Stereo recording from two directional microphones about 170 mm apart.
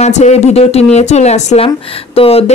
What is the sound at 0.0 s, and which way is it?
Speech, 40° left (ahead or behind).